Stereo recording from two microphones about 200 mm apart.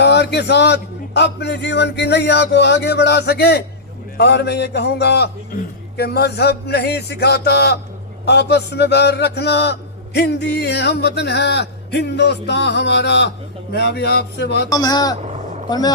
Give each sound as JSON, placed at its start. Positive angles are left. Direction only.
{"t": 0.0, "sound": "speech", "side_deg": 55}
{"t": 14.7, "sound": "speech", "side_deg": 20}